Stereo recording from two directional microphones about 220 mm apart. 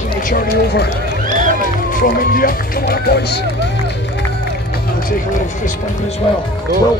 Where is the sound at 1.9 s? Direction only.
40° left (ahead or behind).